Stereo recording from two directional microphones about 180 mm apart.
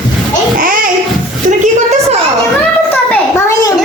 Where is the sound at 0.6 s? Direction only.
50° right (ahead or behind).